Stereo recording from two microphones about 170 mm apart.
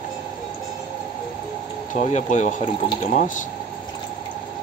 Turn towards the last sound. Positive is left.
turn(degrees=50)  # may be behind; listen again after turning